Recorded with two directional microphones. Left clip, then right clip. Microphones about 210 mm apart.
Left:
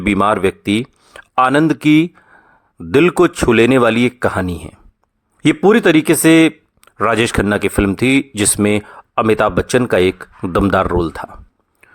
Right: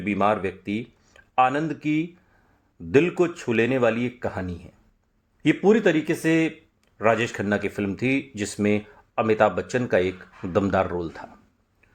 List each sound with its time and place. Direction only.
0.0 s speech: 35° left (ahead or behind)